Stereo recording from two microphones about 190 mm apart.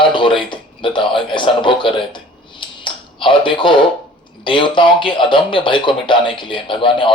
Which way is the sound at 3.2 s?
25° left (ahead or behind).